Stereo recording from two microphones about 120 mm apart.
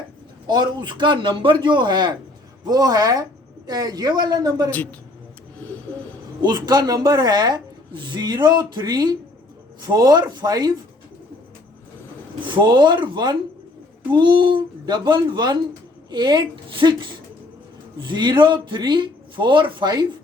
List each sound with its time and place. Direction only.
0.4 s a woman's voice: 40° right (ahead or behind)
4.7 s a woman's voice: 15° left (ahead or behind)
5.5 s bird: 15° left (ahead or behind)
6.4 s a woman's voice: 35° right (ahead or behind)
12.5 s a woman's voice: 40° right (ahead or behind)